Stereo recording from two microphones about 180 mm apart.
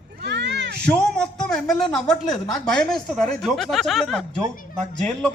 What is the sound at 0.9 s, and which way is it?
A man's voice, 5° left (ahead or behind).